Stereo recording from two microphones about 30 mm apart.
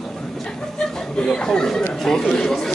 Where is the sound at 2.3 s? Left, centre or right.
Centre.